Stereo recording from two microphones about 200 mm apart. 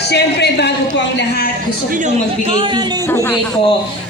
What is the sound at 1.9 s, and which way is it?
Speech, 35° right (ahead or behind).